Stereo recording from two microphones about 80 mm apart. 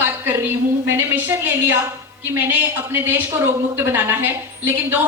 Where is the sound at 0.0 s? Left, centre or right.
Right.